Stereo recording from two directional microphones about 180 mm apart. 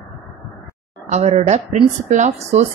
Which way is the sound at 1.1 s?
40° right (ahead or behind).